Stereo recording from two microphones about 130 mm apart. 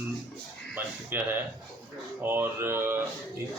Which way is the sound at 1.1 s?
15° right (ahead or behind).